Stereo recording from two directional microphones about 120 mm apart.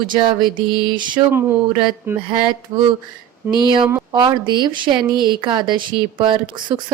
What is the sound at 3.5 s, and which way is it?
Speech, 40° right (ahead or behind).